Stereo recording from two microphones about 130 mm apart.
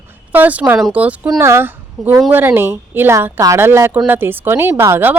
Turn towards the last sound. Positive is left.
turn(degrees=-20)  # may be behind; listen again after turning